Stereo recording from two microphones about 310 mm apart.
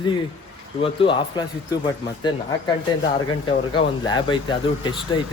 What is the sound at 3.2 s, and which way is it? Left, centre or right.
Speech, centre.